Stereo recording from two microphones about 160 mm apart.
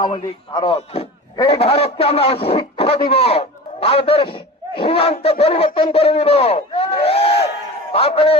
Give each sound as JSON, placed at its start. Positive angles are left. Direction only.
{"t": 0.0, "sound": "a man's voice", "side_deg": 30}